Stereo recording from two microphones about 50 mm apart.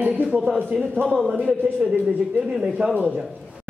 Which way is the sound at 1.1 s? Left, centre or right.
Centre.